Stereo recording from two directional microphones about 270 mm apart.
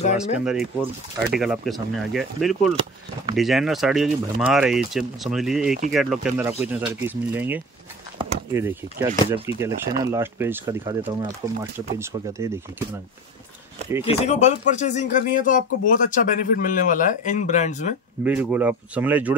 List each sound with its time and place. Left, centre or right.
0.2 s speech: centre
14.0 s speech: left
18.2 s speech: centre